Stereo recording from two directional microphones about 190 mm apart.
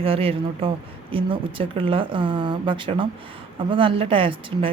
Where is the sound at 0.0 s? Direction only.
30° right (ahead or behind).